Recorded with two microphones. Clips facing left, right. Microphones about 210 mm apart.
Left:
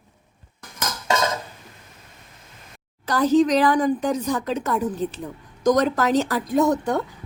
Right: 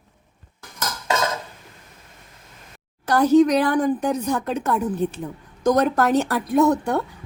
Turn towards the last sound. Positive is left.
turn(degrees=-60)  # may be behind; listen again after turning